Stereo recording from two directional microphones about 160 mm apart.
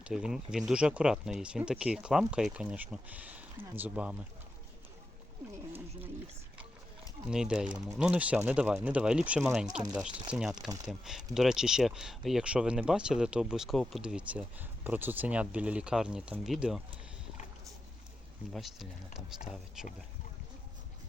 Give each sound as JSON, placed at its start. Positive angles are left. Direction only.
{"t": 0.0, "sound": "speech", "side_deg": -5}
{"t": 7.3, "sound": "speech", "side_deg": -5}
{"t": 18.5, "sound": "speech", "side_deg": 0}
{"t": 19.4, "sound": "speech", "side_deg": 50}
{"t": 19.8, "sound": "speech", "side_deg": -5}